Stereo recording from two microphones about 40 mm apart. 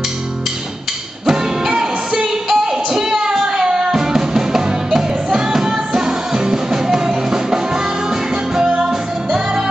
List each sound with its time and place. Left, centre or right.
1.2 s music: centre